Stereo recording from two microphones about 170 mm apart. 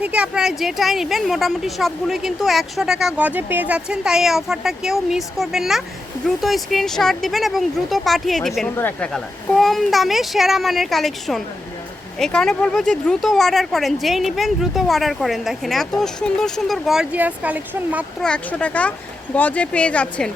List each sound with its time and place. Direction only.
0.0 s speech: 5° right (ahead or behind)
18.2 s speech: 5° left (ahead or behind)